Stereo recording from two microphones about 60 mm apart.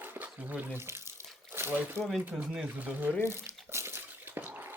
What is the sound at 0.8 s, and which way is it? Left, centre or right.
Speech, right.